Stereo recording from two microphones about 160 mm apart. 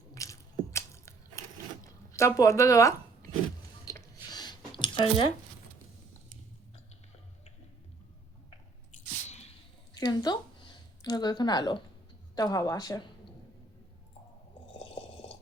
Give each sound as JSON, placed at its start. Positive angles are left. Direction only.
{"t": 0.1, "sound": "biting", "side_deg": 20}
{"t": 4.3, "sound": "a sound", "side_deg": 25}
{"t": 9.9, "sound": "speech", "side_deg": 25}